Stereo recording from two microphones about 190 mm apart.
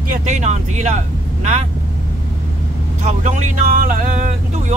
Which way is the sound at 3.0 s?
40° right (ahead or behind).